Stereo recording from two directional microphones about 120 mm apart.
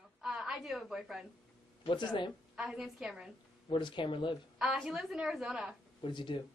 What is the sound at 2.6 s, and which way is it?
Speech, 5° right (ahead or behind).